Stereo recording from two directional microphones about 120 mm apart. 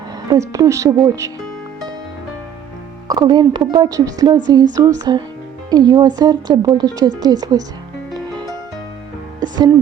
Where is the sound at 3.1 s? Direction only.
35° right (ahead or behind).